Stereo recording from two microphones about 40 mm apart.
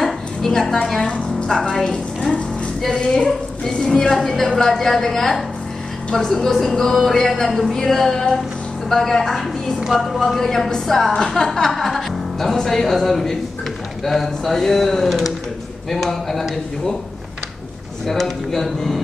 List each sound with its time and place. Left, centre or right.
0.0 s a sound: centre
1.0 s a woman's voice: left; by 16.4 s centre
18.0 s a woman's voice: centre